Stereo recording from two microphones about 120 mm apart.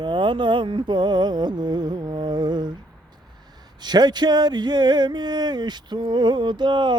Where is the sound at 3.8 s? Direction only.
35° right (ahead or behind).